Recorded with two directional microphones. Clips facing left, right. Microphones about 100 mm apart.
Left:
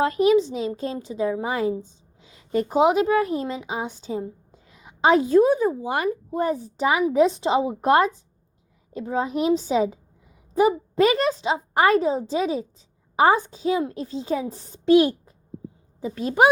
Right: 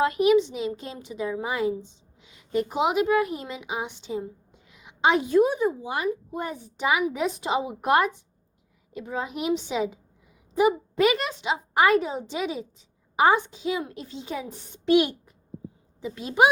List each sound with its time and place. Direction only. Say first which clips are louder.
0.0 s a woman's voice: left 2 dB; 35° left (ahead or behind)